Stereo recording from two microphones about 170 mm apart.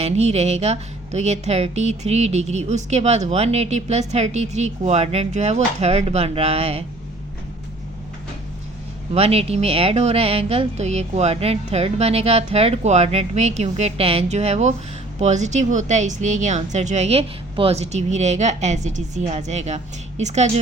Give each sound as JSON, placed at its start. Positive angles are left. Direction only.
{"t": 0.0, "sound": "speech", "side_deg": -40}
{"t": 9.1, "sound": "speech", "side_deg": -35}